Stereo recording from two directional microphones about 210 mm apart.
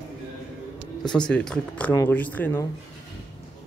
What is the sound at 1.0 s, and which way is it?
Speech, 5° left (ahead or behind).